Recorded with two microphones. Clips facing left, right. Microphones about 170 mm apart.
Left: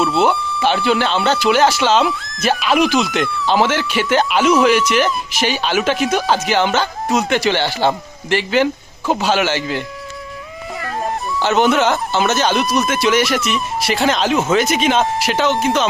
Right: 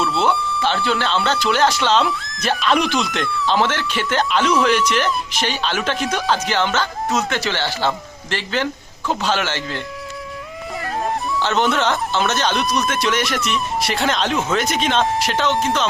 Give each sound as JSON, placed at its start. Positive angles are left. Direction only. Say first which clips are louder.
{"t": 0.0, "sound": "a sound", "louder": "left 3 dB", "side_deg": 5}
{"t": 0.9, "sound": "speech", "louder": "left 4 dB", "side_deg": 15}
{"t": 11.3, "sound": "speech", "louder": "left 5 dB", "side_deg": 10}